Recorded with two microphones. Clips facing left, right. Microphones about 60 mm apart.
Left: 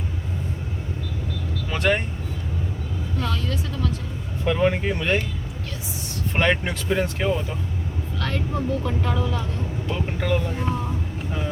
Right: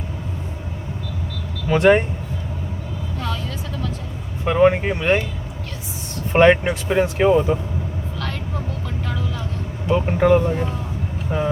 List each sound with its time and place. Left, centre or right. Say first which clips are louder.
1.7 s speech: right 8 dB; right
3.2 s speech: left 1 dB; centre
4.4 s speech: right 6 dB; right
6.3 s speech: right 9 dB; centre
8.8 s speech: left 3 dB; centre
9.9 s speech: right 10 dB; right